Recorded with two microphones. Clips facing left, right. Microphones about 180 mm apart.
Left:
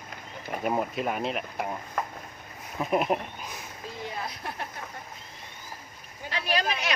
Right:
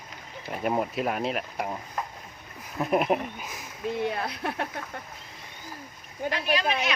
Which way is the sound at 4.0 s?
65° right (ahead or behind).